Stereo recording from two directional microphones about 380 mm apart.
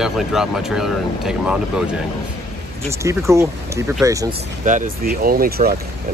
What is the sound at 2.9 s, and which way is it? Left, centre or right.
Speech, centre.